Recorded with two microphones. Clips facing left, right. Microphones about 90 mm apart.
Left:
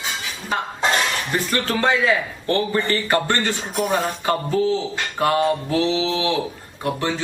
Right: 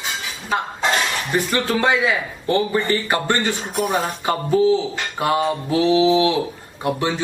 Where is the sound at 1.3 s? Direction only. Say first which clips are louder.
Right 4 dB; 15° right (ahead or behind).